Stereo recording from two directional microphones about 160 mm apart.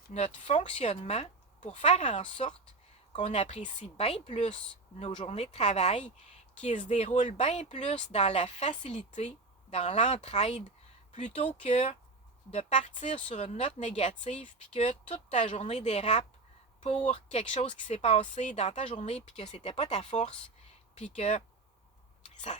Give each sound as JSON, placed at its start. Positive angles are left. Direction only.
{"t": 0.1, "sound": "speech", "side_deg": 50}